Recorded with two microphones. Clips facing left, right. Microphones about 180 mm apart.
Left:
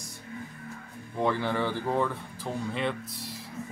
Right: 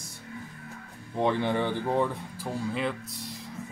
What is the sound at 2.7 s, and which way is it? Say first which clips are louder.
Speech: even; centre (ahead or behind).